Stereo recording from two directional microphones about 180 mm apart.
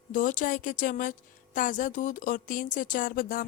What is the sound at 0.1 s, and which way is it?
Speech, 45° left (ahead or behind).